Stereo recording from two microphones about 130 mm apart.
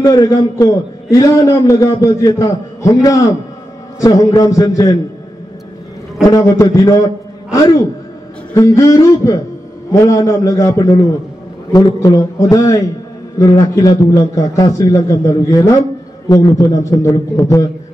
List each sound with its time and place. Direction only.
0.0 s a man's voice: 30° left (ahead or behind)
6.2 s a man's voice: 25° left (ahead or behind)
8.5 s a man's voice: 25° left (ahead or behind)